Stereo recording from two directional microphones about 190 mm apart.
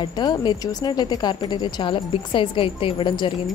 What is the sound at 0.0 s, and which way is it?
Speech, 20° left (ahead or behind).